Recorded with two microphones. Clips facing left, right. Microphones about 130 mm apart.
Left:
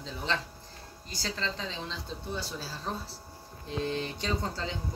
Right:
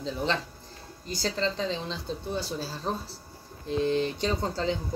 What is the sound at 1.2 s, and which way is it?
Speech, 20° right (ahead or behind).